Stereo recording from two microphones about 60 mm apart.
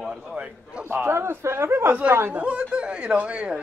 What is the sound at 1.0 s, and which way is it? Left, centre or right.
Speech, right.